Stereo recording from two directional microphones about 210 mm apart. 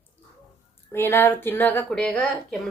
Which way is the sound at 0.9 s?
10° left (ahead or behind).